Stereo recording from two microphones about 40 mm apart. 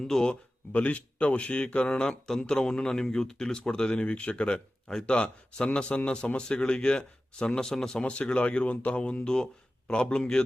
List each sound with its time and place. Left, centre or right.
0.0 s speech: centre
0.7 s speech: left; by 8.0 s centre
8.0 s speech: left